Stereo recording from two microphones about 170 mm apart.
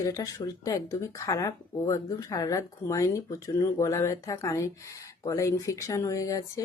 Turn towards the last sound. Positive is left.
turn(degrees=20)  # may be behind; listen again after turning